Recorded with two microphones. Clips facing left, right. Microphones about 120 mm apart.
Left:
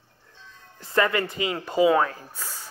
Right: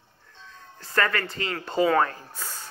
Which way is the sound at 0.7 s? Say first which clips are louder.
Left 3 dB; 20° left (ahead or behind).